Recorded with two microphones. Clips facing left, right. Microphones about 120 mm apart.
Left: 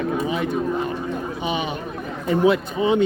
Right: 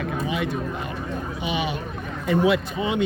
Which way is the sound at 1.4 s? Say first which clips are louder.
Even; 40° left (ahead or behind).